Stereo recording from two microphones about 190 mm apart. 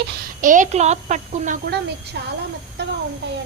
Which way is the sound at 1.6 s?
60° right (ahead or behind).